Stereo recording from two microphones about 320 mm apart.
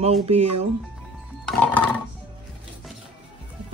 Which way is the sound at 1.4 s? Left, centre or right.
Centre.